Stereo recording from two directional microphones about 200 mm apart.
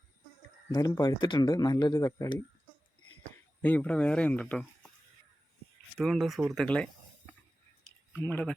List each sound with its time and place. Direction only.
0.7 s speech: 20° left (ahead or behind)
3.6 s speech: 5° left (ahead or behind)
6.0 s speech: centre (ahead or behind)
8.1 s speech: 10° left (ahead or behind)